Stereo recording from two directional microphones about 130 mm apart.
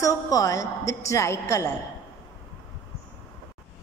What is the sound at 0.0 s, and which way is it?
A woman's voice, 25° left (ahead or behind).